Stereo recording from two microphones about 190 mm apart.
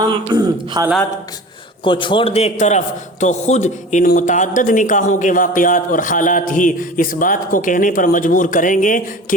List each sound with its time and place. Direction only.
0.0 s speech: 20° right (ahead or behind)
1.8 s a man's voice: 25° left (ahead or behind); by 9.0 s 45° left (ahead or behind)